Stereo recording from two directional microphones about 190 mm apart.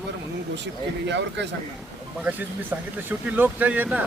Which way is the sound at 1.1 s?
65° right (ahead or behind).